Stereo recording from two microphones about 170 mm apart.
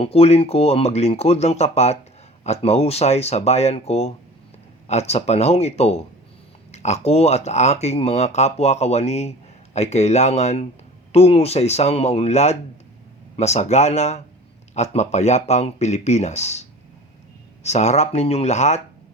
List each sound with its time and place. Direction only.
0.0 s speech: 35° left (ahead or behind)